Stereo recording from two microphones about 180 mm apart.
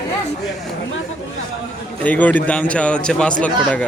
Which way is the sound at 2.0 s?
10° left (ahead or behind).